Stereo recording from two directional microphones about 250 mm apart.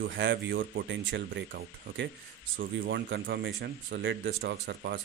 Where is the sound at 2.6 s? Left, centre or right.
Right.